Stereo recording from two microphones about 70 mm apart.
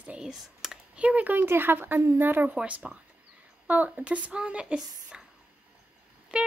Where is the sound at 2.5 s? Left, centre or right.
Centre.